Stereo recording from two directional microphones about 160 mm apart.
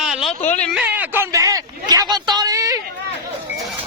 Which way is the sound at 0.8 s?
10° right (ahead or behind).